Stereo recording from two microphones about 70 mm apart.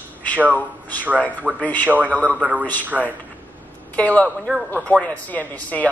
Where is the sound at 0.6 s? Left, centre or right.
Left.